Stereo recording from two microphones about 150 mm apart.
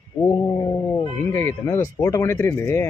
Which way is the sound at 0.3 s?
20° left (ahead or behind).